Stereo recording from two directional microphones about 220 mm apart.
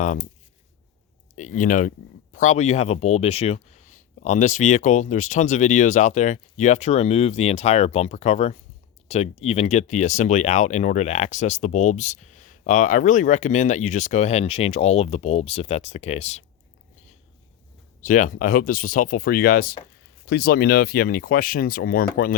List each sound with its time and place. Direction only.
0.0 s speech: 35° left (ahead or behind)
1.4 s speech: 35° left (ahead or behind)
18.0 s speech: 35° left (ahead or behind)